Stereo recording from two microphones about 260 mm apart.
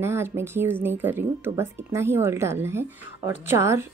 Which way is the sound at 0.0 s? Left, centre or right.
Centre.